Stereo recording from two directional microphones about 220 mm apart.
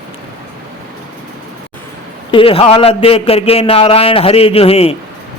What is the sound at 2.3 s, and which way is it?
A man's voice, 25° left (ahead or behind).